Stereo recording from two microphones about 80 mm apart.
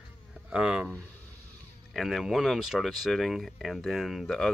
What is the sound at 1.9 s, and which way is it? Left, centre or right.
Speech, centre.